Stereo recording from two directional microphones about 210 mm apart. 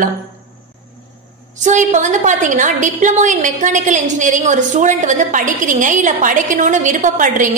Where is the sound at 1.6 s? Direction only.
35° right (ahead or behind).